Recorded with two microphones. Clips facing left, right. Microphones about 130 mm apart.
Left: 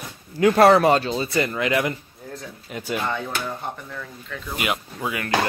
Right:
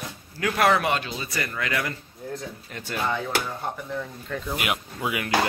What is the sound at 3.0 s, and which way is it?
Speech, centre (ahead or behind).